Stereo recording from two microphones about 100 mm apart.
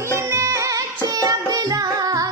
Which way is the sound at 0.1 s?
30° right (ahead or behind).